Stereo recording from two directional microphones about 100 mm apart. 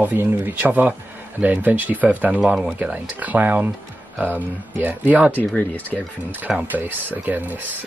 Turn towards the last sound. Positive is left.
turn(degrees=-15)  # may be behind; listen again after turning